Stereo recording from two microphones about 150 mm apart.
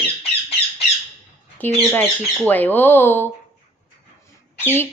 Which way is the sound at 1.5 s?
15° left (ahead or behind).